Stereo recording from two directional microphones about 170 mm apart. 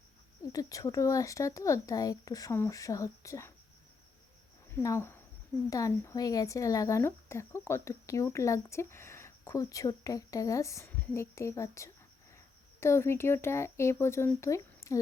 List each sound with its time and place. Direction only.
0.5 s speech: 20° left (ahead or behind)
4.7 s speech: 15° left (ahead or behind)